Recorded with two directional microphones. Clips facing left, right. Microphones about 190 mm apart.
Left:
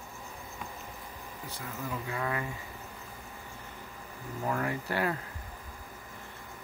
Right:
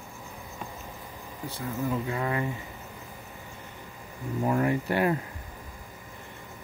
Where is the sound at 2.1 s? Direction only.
30° right (ahead or behind).